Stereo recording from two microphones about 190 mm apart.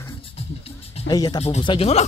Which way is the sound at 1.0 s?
20° left (ahead or behind).